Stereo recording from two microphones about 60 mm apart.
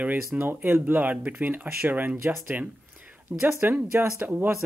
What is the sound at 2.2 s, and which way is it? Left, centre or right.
Speech, right.